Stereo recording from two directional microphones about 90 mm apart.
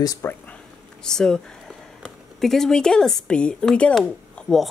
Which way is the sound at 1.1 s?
5° left (ahead or behind).